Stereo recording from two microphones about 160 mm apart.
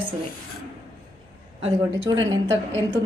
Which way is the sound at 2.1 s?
25° right (ahead or behind).